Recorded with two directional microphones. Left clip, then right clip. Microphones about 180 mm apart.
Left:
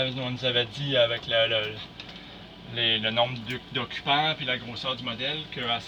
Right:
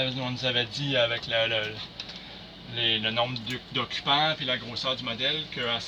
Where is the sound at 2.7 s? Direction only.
5° left (ahead or behind).